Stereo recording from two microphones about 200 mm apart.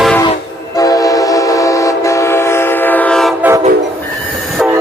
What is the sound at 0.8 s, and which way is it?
Train, 15° left (ahead or behind).